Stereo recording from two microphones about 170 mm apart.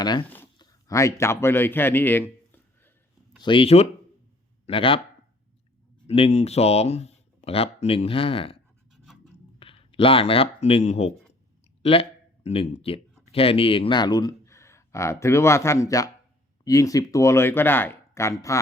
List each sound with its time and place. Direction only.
0.0 s speech: 25° left (ahead or behind)
0.5 s a sound: 20° left (ahead or behind)
3.4 s speech: 30° left (ahead or behind)
6.1 s speech: 35° left (ahead or behind)
8.9 s scratch: centre (ahead or behind)
9.6 s speech: 30° left (ahead or behind)